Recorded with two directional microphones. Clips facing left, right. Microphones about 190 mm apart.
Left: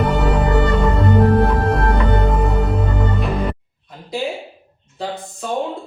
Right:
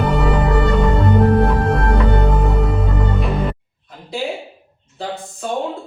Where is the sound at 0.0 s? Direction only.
Centre (ahead or behind).